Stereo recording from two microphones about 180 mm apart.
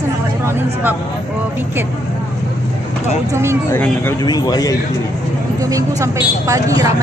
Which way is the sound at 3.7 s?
10° left (ahead or behind).